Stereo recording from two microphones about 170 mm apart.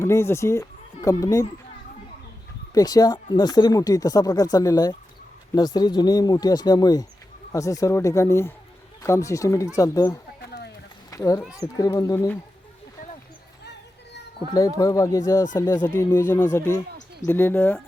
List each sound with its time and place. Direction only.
0.0 s speech: 15° left (ahead or behind)
2.7 s speech: 20° left (ahead or behind)
14.8 s speech: 20° left (ahead or behind)